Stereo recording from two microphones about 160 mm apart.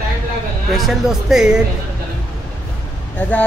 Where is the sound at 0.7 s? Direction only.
Centre (ahead or behind).